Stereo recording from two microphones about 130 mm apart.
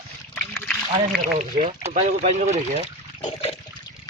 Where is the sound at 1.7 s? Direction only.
60° right (ahead or behind).